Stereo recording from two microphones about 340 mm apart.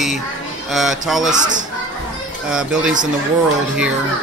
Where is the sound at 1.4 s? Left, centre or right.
Right.